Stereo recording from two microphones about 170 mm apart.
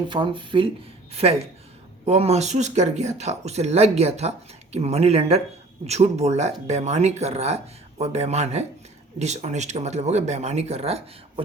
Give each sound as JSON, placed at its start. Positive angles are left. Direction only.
{"t": 0.1, "sound": "speech", "side_deg": -30}